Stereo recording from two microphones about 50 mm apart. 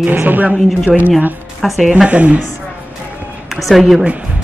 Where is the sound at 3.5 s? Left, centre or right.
Centre.